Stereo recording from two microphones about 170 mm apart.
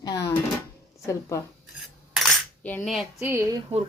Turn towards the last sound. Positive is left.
turn(degrees=-15)  # may be behind; listen again after turning